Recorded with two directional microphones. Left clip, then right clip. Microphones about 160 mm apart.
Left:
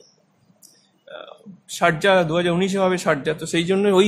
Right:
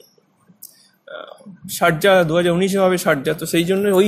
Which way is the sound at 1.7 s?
10° right (ahead or behind).